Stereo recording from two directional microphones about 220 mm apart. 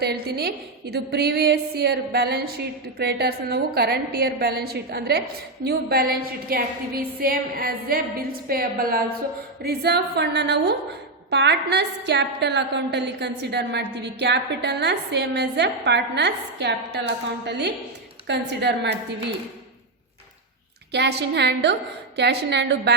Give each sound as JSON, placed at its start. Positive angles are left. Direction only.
{"t": 0.0, "sound": "a woman's voice", "side_deg": -45}
{"t": 20.9, "sound": "a woman's voice", "side_deg": -50}